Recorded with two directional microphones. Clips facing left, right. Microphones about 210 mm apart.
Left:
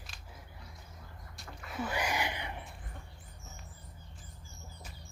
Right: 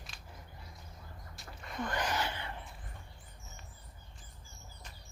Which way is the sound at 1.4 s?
5° left (ahead or behind).